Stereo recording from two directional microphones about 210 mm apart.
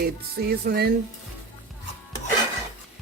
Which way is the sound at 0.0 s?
45° right (ahead or behind).